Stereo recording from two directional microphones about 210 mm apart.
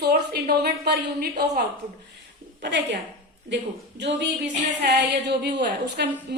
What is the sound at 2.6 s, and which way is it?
A woman's voice, 55° right (ahead or behind).